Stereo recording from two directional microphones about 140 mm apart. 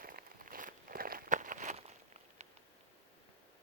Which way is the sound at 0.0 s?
85° right.